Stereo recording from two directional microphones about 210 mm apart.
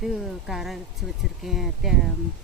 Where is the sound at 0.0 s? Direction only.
Centre (ahead or behind).